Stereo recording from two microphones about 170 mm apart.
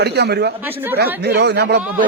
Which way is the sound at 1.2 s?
80° right.